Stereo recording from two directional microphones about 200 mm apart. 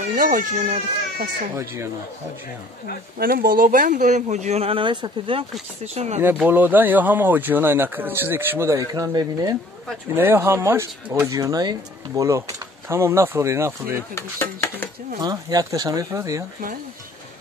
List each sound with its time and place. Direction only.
0.1 s speech: 45° right (ahead or behind)
1.6 s speech: 15° right (ahead or behind)
3.2 s speech: 50° right (ahead or behind)
6.2 s speech: 10° right (ahead or behind)
14.1 s stir: 10° left (ahead or behind)
15.1 s speech: 20° right (ahead or behind)